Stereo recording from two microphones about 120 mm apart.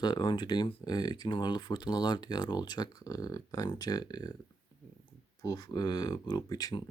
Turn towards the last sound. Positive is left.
turn(degrees=30)  # may be behind; listen again after turning